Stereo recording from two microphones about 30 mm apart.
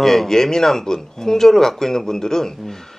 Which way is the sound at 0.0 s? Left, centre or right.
Centre.